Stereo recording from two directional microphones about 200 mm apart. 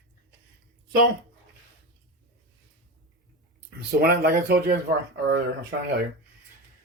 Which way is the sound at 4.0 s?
55° right (ahead or behind).